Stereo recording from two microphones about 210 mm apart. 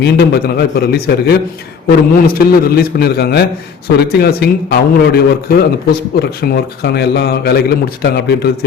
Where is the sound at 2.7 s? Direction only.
45° left (ahead or behind).